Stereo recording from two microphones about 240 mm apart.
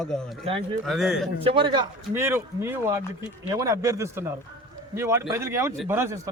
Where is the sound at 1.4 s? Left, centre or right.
Right.